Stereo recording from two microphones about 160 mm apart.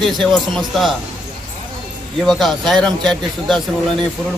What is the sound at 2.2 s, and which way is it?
Speech, centre (ahead or behind).